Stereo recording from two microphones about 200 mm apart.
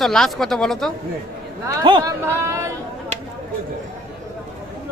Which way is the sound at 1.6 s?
20° right (ahead or behind).